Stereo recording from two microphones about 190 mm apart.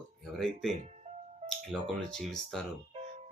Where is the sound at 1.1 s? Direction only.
40° right (ahead or behind).